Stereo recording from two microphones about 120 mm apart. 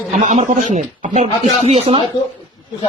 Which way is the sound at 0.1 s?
80° right.